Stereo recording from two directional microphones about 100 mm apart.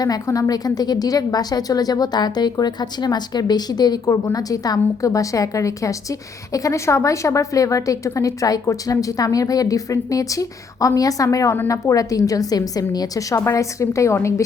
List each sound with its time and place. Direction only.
0.0 s a woman's voice: 35° left (ahead or behind)